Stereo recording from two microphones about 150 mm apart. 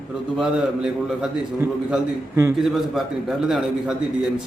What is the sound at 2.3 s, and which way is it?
Speech, 20° right (ahead or behind).